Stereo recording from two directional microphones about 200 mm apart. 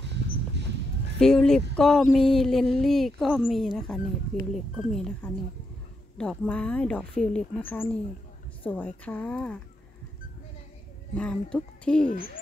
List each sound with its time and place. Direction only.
1.2 s speech: centre (ahead or behind)
11.1 s speech: 5° left (ahead or behind)